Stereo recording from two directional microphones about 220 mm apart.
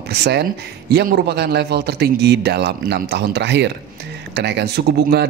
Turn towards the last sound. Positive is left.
turn(degrees=-50)  # may be behind; listen again after turning